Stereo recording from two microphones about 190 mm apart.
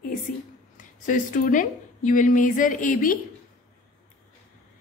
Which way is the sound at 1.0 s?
45° left (ahead or behind).